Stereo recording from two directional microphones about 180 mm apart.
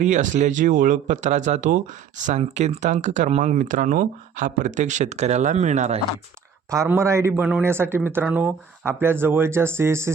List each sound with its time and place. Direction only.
0.0 s speech: 45° right (ahead or behind)
6.7 s a man's voice: 15° right (ahead or behind)